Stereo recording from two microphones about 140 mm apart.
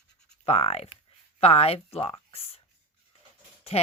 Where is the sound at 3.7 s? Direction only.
45° left (ahead or behind).